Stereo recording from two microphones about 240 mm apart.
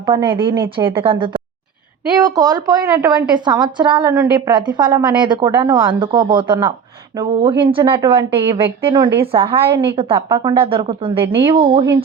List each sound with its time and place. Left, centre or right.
0.0 s a woman's voice: centre